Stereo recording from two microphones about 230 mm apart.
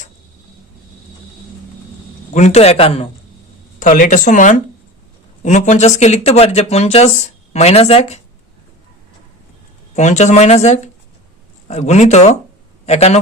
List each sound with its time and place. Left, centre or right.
2.3 s speech: left
9.9 s a man's voice: left